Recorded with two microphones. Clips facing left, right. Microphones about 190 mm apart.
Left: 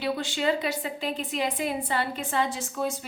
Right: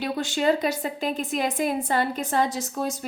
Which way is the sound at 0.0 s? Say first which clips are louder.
Right 3 dB; 45° right (ahead or behind).